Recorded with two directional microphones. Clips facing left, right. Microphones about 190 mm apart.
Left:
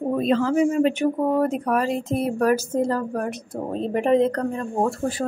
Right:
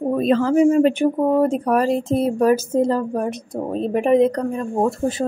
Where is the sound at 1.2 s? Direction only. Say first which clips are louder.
Right 4 dB; 25° right (ahead or behind).